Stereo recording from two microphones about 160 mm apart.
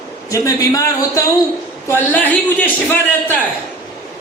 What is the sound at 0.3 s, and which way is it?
A woman's voice, 20° left (ahead or behind).